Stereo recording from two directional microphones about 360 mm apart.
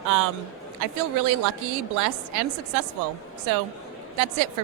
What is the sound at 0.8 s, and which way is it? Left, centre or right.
Speech, right.